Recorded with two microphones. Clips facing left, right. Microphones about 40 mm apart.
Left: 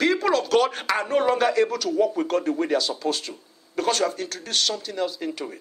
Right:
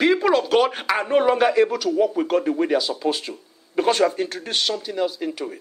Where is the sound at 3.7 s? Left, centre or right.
Right.